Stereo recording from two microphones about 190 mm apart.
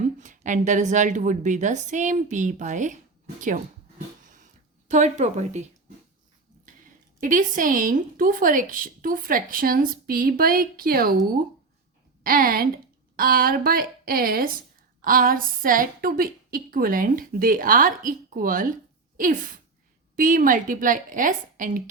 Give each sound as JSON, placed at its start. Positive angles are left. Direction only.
{"t": 0.0, "sound": "a woman's voice", "side_deg": -40}
{"t": 3.4, "sound": "a sound", "side_deg": -40}
{"t": 4.9, "sound": "a woman's voice", "side_deg": -40}
{"t": 7.2, "sound": "a woman's voice", "side_deg": -45}
{"t": 12.2, "sound": "a woman's voice", "side_deg": -50}